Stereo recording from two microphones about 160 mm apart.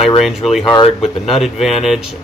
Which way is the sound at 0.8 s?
40° left (ahead or behind).